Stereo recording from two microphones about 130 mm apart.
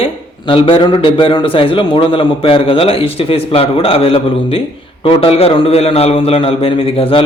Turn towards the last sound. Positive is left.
turn(degrees=45)  # may be behind; listen again after turning